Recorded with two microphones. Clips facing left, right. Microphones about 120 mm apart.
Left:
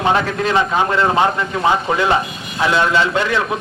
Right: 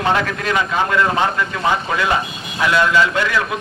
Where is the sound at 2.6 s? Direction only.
30° left (ahead or behind).